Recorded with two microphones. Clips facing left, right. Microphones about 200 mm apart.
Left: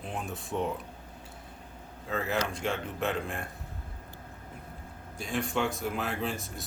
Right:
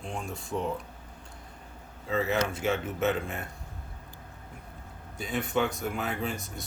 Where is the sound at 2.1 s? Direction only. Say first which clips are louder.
Right 3 dB; centre (ahead or behind).